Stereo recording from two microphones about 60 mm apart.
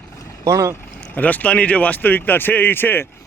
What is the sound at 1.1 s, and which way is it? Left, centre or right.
Speech, left.